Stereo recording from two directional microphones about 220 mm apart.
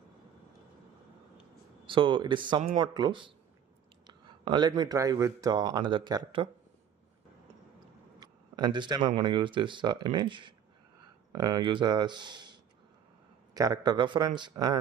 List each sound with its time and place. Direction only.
1.9 s speech: 20° right (ahead or behind)
8.2 s speech: 20° right (ahead or behind)
13.6 s speech: 20° right (ahead or behind)